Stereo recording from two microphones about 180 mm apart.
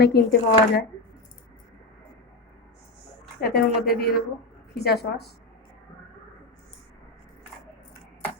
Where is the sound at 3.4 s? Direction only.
60° left (ahead or behind).